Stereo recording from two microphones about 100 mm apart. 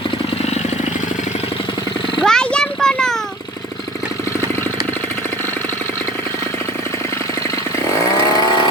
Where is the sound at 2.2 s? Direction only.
10° left (ahead or behind).